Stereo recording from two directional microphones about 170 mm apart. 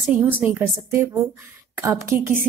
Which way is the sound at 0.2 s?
10° right (ahead or behind).